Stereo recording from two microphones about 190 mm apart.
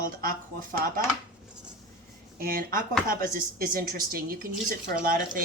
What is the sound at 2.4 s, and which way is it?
A woman's voice, 50° right (ahead or behind).